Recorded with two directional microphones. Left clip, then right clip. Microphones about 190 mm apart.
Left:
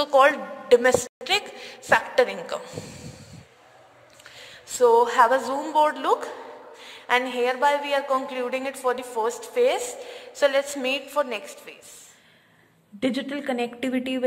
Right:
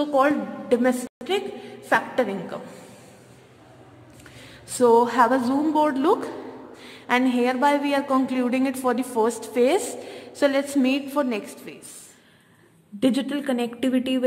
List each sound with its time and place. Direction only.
0.0 s a woman's voice: 25° left (ahead or behind)
4.4 s a woman's voice: centre (ahead or behind)
13.0 s a woman's voice: centre (ahead or behind)